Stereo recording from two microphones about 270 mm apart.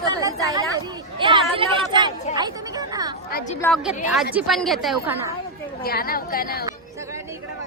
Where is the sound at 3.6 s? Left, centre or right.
Centre.